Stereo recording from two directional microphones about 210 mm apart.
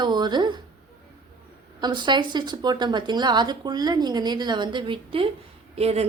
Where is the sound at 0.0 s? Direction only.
20° right (ahead or behind).